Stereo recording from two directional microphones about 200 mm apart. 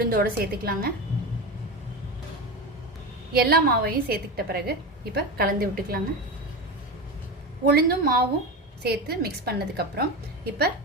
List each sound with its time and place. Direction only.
0.0 s a woman's voice: 50° right (ahead or behind)
3.3 s a woman's voice: 50° right (ahead or behind)
7.6 s a woman's voice: 50° right (ahead or behind)